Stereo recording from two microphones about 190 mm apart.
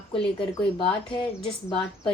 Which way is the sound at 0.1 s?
30° left (ahead or behind).